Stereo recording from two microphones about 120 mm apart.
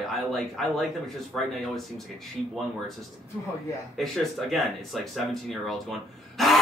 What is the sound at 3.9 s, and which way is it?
Speech, centre (ahead or behind).